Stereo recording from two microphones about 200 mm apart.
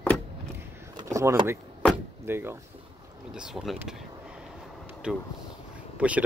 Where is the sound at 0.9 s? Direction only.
15° right (ahead or behind).